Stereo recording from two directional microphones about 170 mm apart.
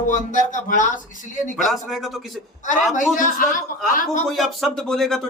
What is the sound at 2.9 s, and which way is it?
A man's voice, 50° left (ahead or behind).